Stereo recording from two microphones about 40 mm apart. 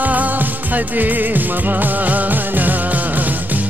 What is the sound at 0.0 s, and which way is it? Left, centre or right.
Music, right.